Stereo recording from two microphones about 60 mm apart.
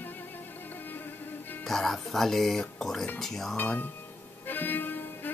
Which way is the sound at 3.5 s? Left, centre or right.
Left.